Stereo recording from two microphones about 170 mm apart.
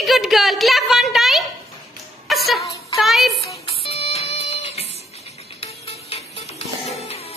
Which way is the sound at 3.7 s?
35° left (ahead or behind).